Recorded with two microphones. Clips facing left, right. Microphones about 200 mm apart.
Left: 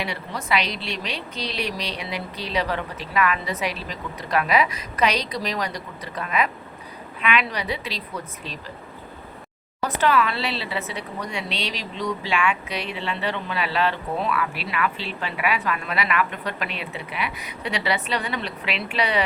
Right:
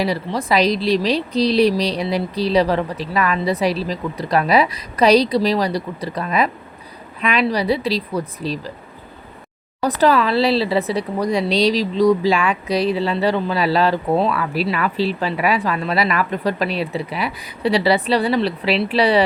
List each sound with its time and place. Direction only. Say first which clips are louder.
0.0 s a woman's voice: right 9 dB; 35° right (ahead or behind)
10.0 s a woman's voice: right 6 dB; 35° right (ahead or behind)